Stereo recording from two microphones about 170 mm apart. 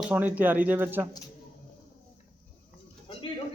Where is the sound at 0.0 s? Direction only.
10° right (ahead or behind).